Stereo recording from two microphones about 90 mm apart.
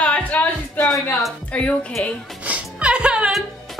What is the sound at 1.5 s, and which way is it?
Speech, 15° left (ahead or behind).